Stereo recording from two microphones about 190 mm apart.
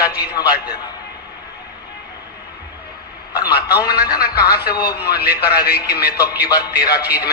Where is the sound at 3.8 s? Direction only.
55° left (ahead or behind).